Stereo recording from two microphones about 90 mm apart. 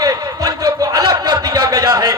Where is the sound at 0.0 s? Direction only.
40° right (ahead or behind).